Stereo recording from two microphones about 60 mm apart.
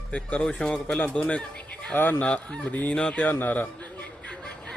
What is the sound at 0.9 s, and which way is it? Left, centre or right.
Speech, left.